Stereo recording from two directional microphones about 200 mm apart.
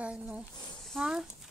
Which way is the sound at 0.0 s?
5° right (ahead or behind).